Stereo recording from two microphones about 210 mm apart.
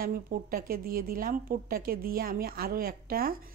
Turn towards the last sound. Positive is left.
turn(degrees=-45)  # may be behind; listen again after turning